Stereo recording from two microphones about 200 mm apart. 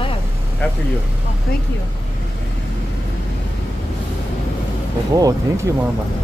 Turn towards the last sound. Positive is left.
turn(degrees=-15)  # may be behind; listen again after turning